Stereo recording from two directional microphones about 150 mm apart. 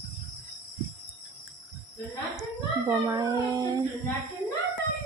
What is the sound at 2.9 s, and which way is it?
Speech, 20° right (ahead or behind).